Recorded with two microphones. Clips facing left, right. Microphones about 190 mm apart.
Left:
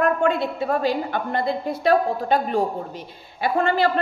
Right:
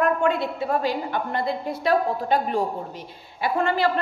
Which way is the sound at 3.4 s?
30° left (ahead or behind).